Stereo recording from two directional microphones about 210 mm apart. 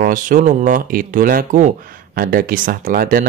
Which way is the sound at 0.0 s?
40° right (ahead or behind).